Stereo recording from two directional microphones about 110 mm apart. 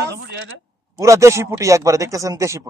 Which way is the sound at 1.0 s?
25° right (ahead or behind).